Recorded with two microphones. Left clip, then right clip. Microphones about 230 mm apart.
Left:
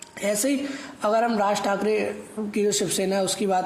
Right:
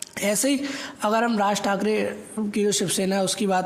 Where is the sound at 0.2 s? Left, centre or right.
Right.